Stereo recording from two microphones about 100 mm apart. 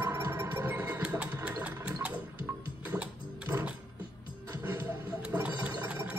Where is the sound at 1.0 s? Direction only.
15° right (ahead or behind).